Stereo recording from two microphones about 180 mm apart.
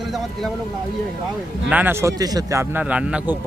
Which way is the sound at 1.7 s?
10° right (ahead or behind).